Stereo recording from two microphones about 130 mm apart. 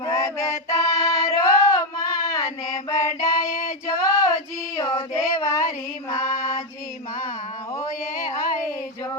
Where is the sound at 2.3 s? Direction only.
25° left (ahead or behind).